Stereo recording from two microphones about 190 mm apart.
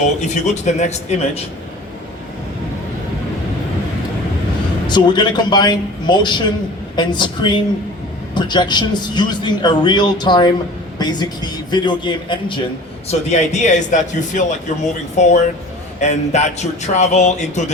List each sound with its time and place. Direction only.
0.0 s a man's voice: 35° left (ahead or behind)
4.9 s a man's voice: 25° left (ahead or behind)
13.1 s a man's voice: 35° left (ahead or behind)